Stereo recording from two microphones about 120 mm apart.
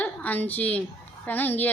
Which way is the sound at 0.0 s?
15° left (ahead or behind).